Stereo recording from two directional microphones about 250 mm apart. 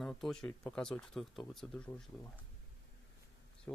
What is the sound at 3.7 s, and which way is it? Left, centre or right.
Speech, centre.